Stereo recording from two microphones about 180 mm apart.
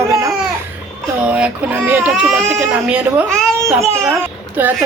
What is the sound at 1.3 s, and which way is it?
A woman's voice, 10° right (ahead or behind).